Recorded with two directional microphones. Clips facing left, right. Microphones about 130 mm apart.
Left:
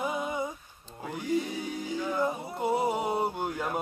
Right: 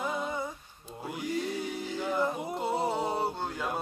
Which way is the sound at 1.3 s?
15° left (ahead or behind).